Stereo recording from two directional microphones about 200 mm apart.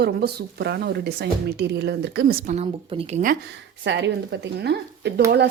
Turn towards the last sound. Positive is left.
turn(degrees=-55)  # may be behind; listen again after turning